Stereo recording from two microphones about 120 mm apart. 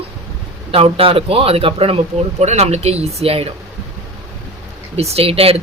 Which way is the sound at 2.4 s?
65° right (ahead or behind).